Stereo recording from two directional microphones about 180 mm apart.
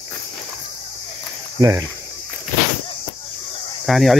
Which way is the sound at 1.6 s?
20° right (ahead or behind).